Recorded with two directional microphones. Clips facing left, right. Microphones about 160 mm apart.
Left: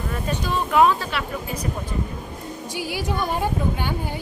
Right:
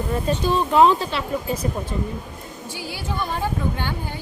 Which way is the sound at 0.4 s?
30° right (ahead or behind).